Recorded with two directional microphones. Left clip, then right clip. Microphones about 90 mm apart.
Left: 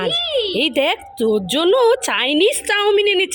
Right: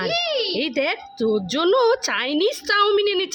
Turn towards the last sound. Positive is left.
turn(degrees=5)  # may be behind; listen again after turning